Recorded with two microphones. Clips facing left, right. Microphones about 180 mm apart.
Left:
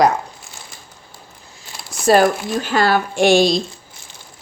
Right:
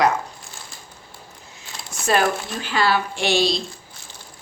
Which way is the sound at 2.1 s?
40° left (ahead or behind).